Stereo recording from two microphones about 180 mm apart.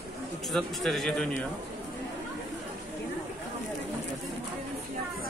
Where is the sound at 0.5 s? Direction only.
Centre (ahead or behind).